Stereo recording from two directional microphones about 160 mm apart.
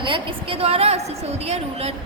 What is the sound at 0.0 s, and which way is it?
A woman's voice, 30° right (ahead or behind).